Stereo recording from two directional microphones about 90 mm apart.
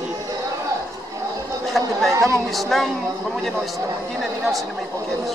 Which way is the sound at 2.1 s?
35° right (ahead or behind).